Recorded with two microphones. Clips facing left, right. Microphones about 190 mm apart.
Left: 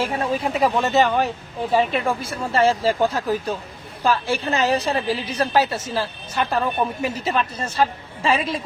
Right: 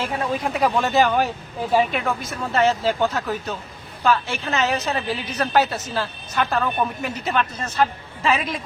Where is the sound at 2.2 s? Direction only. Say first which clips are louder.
Even; 30° left (ahead or behind).